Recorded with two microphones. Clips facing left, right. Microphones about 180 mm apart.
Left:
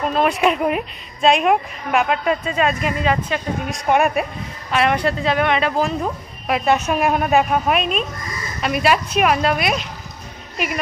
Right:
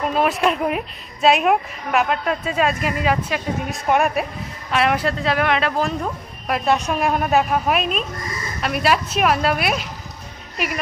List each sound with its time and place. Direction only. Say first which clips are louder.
0.1 s a woman's voice: left 2 dB; centre (ahead or behind)